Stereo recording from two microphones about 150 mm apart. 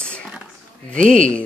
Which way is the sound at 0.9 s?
60° right (ahead or behind).